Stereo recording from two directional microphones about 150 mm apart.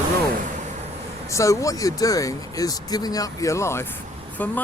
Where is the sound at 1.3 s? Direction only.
20° left (ahead or behind).